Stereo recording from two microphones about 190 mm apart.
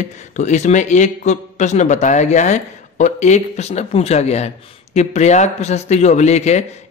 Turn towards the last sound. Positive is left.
turn(degrees=35)  # may be behind; listen again after turning